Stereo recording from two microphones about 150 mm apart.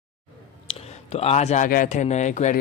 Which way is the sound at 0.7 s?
40° left (ahead or behind).